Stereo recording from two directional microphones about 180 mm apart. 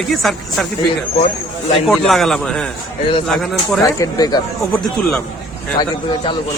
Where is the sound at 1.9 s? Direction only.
Centre (ahead or behind).